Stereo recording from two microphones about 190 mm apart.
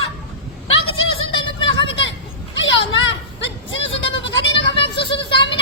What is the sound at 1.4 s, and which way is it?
Vehicle, 25° left (ahead or behind).